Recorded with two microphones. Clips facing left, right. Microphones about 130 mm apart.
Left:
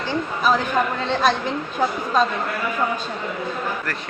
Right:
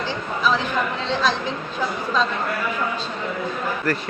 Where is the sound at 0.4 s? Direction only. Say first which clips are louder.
Left 2 dB; 50° left (ahead or behind).